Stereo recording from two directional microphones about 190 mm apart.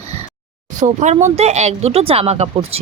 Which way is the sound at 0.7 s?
40° right (ahead or behind).